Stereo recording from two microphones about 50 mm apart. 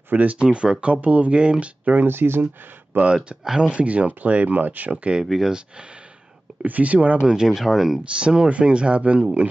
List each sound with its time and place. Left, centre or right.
0.1 s speech: right
0.4 s speech: right
2.0 s speech: right
2.9 s speech: right
5.2 s speech: centre
6.6 s speech: right; by 8.0 s centre
8.0 s speech: right